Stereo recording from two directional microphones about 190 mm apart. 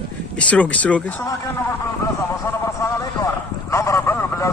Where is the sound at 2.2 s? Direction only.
15° left (ahead or behind).